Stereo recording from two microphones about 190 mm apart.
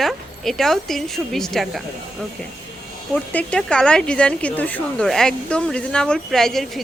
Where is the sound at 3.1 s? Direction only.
5° left (ahead or behind).